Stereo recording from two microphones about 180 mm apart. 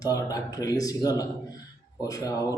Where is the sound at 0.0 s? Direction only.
20° left (ahead or behind).